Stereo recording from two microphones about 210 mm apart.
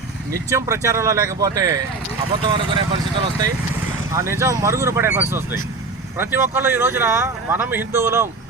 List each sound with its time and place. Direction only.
0.3 s speech: 15° right (ahead or behind)
4.1 s speech: 15° right (ahead or behind)